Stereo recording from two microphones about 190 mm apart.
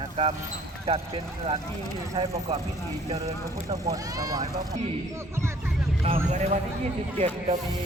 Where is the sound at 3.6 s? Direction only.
20° right (ahead or behind).